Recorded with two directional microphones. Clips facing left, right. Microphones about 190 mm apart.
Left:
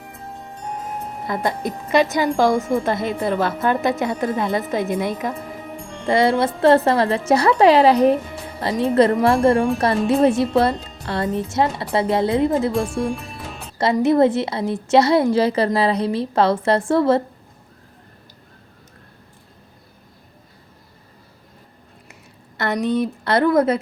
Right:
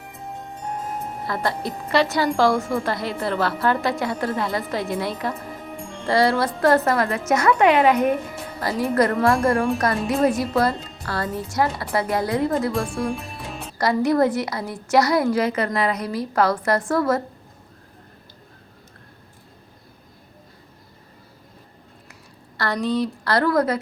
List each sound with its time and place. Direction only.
1.3 s a woman's voice: 20° left (ahead or behind)
12.7 s music: centre (ahead or behind)
13.7 s a woman's voice: 25° left (ahead or behind)
22.5 s a woman's voice: 20° left (ahead or behind)